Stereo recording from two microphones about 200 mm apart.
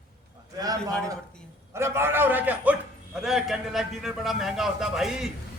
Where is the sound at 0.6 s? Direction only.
20° right (ahead or behind); by 5.3 s centre (ahead or behind).